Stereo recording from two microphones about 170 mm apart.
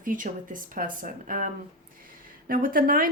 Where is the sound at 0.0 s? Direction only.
50° right (ahead or behind).